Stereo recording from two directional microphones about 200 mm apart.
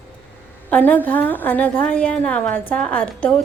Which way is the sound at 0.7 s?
10° left (ahead or behind).